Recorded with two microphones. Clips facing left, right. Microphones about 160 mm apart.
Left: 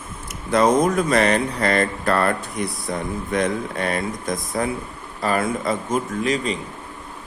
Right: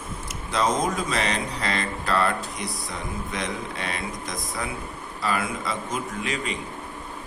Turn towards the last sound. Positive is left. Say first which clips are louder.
# left 7 dB
turn(degrees=40)  # may be behind; listen again after turning